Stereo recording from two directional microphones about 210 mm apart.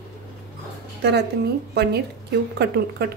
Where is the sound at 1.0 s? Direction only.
55° right (ahead or behind).